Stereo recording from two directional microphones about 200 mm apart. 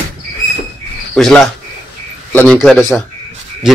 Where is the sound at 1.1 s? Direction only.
Centre (ahead or behind).